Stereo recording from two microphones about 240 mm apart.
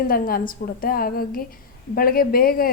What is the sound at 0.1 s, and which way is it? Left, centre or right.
Speech, left.